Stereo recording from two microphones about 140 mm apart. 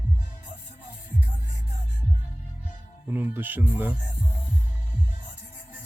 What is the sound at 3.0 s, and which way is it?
Speech, 15° right (ahead or behind).